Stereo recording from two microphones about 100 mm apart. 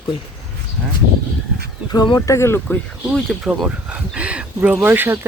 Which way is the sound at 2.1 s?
30° left (ahead or behind).